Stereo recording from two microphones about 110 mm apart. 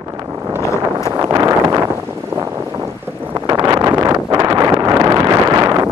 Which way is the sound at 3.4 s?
40° right (ahead or behind).